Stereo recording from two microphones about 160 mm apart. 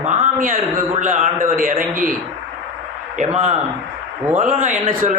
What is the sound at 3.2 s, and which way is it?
Speech, 50° right (ahead or behind).